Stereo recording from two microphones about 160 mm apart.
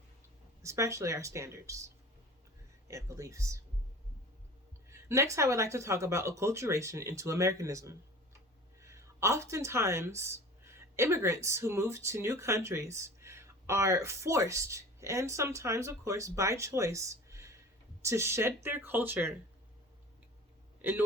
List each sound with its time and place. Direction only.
0.6 s a woman's voice: 20° right (ahead or behind)
4.9 s a woman's voice: 15° right (ahead or behind)